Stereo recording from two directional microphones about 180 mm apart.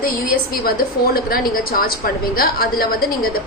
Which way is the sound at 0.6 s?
55° left (ahead or behind).